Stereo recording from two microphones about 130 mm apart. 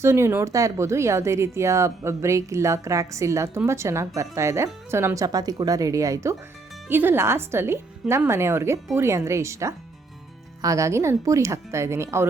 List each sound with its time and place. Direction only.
0.0 s speech: 20° right (ahead or behind)